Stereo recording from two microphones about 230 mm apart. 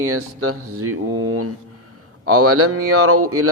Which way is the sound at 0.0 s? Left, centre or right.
Right.